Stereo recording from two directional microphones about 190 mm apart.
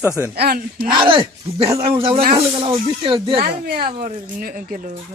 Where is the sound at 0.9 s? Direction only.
25° right (ahead or behind).